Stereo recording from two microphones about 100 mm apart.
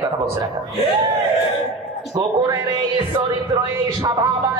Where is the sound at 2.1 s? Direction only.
40° right (ahead or behind).